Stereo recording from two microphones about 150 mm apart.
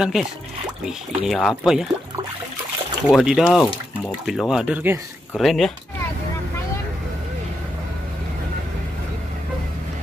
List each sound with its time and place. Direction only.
0.0 s speech: 5° right (ahead or behind)
3.2 s speech: 5° right (ahead or behind)